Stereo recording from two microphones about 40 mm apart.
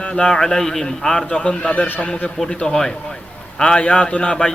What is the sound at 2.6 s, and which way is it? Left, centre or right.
A man's voice, centre.